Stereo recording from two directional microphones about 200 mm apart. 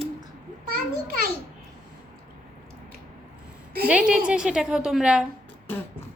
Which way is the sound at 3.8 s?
5° right (ahead or behind).